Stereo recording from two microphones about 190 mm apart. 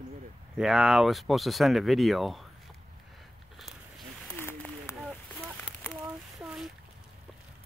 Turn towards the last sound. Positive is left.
turn(degrees=-5)  # may be behind; listen again after turning